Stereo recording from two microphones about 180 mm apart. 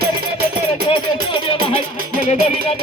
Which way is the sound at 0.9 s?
30° left (ahead or behind).